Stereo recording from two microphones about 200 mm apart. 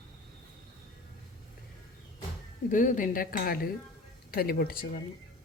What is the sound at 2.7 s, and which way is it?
Speech, 40° left (ahead or behind).